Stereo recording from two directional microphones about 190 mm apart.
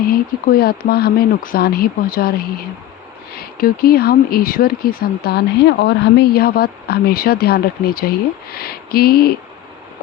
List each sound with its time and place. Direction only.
0.1 s speech: 50° left (ahead or behind)